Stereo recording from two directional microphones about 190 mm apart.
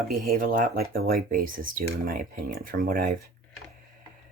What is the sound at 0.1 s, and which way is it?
Speech, 50° right (ahead or behind).